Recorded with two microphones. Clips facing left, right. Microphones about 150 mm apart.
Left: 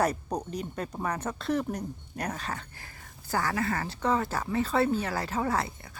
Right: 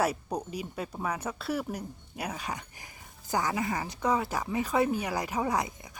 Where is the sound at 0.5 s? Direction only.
5° right (ahead or behind).